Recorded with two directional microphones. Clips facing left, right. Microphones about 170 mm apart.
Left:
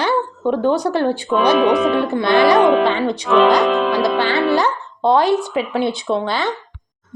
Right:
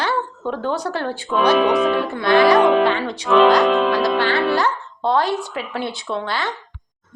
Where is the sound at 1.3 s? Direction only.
Centre (ahead or behind).